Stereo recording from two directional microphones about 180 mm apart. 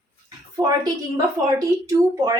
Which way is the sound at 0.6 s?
20° right (ahead or behind).